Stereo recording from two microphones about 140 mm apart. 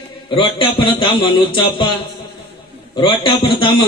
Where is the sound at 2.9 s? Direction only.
35° left (ahead or behind).